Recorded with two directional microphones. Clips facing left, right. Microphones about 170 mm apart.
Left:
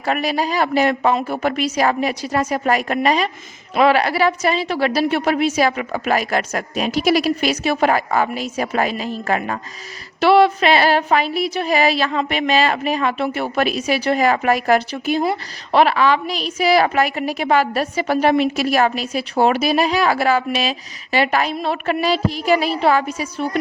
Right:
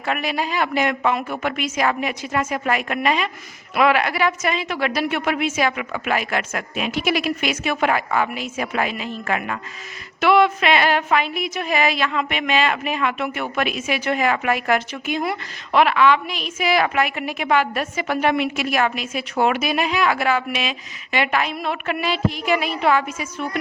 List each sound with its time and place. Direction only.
0.0 s speech: 35° left (ahead or behind)